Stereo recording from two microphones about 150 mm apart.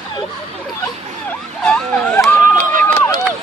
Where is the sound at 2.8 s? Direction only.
15° left (ahead or behind).